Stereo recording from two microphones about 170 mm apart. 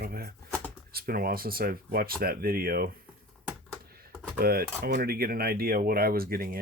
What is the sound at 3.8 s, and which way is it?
Computer keyboard, 60° right (ahead or behind).